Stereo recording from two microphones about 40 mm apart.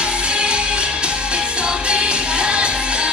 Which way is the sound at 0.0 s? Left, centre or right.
Right.